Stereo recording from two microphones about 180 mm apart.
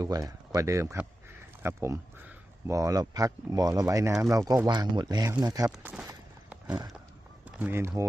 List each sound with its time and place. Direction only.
0.0 s speech: 20° right (ahead or behind)
5.7 s speech: 5° right (ahead or behind)
7.4 s speech: 5° right (ahead or behind)